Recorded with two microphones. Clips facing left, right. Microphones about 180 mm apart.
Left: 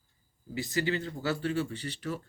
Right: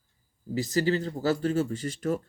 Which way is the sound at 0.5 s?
40° right (ahead or behind).